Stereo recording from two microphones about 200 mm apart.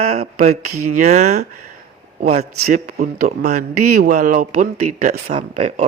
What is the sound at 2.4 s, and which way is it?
Speech, 50° right (ahead or behind).